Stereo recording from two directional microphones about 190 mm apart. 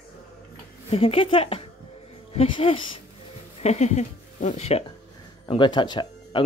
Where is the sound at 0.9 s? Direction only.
30° left (ahead or behind).